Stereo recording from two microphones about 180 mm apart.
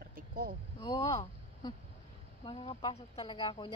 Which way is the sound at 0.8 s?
25° left (ahead or behind).